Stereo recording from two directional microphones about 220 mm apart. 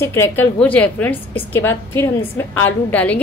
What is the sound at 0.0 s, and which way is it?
A woman's voice, 10° left (ahead or behind).